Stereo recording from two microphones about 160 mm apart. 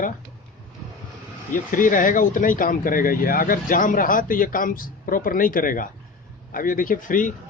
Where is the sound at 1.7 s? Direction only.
55° left (ahead or behind).